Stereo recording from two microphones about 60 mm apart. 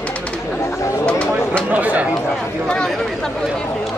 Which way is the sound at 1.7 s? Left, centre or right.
Right.